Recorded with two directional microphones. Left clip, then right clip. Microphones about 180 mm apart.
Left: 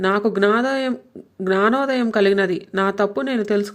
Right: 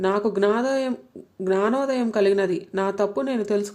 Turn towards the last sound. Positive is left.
turn(degrees=15)  # may be behind; listen again after turning